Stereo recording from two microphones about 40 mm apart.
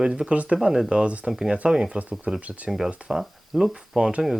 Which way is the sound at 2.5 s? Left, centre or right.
Right.